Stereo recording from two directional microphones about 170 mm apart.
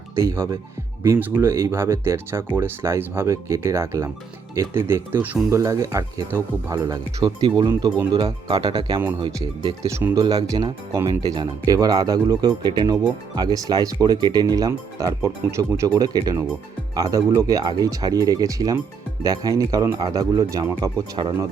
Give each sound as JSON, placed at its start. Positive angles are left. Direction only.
{"t": 0.2, "sound": "speech", "side_deg": -15}
{"t": 10.2, "sound": "speech", "side_deg": -25}